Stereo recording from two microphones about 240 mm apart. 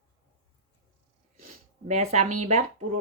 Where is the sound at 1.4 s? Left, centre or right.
Right.